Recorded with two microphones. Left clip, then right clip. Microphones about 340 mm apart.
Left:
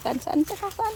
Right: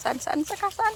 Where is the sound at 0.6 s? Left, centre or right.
Centre.